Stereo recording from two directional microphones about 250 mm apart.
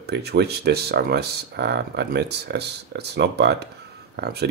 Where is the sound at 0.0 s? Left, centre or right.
Right.